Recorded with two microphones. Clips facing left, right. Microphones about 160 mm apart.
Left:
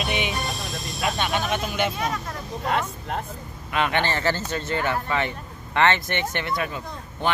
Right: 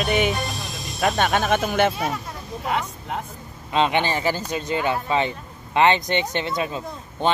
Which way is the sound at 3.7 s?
20° right (ahead or behind).